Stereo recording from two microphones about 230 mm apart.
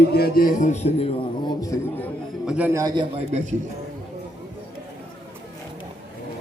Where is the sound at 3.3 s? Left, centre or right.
Right.